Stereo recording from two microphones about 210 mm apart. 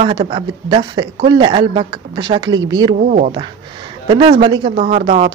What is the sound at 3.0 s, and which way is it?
Speech, 35° right (ahead or behind).